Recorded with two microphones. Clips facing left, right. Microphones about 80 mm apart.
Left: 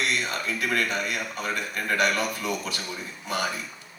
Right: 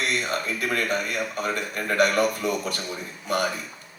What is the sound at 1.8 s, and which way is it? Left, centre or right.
Speech, right.